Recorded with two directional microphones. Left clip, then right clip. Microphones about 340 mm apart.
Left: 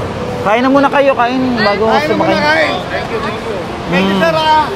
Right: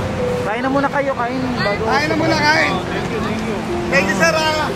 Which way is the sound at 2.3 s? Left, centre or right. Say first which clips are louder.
Left 2 dB; right.